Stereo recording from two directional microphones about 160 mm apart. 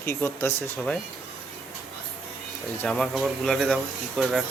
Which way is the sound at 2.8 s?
5° left (ahead or behind).